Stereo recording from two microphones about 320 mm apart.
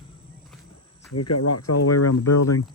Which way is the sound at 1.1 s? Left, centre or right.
Left.